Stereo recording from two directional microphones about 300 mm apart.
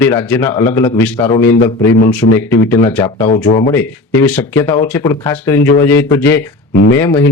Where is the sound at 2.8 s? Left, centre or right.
Centre.